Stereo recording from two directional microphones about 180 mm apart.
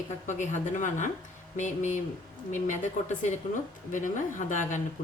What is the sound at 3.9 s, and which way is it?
Speech, 45° left (ahead or behind).